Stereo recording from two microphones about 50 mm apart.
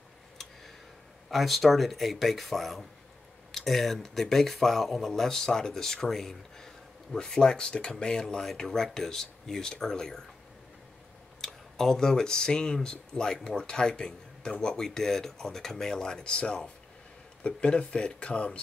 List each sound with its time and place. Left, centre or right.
1.3 s speech: centre
11.4 s speech: centre